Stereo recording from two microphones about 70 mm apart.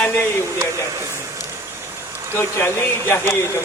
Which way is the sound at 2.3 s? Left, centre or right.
Left.